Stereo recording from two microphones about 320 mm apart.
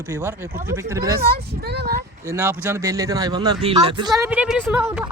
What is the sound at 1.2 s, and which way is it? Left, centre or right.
Speech, right.